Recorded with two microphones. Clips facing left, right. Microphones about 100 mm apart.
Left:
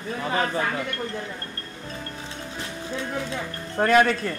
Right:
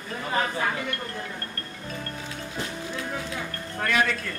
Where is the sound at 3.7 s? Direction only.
35° left (ahead or behind).